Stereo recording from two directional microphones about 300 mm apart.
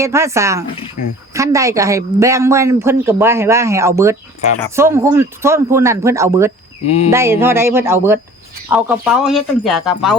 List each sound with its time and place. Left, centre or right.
0.0 s speech: centre